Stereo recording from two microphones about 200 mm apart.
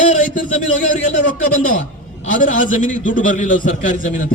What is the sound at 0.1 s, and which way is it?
Speech, 40° left (ahead or behind).